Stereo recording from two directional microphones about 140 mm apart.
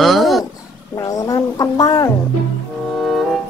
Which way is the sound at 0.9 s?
25° left (ahead or behind).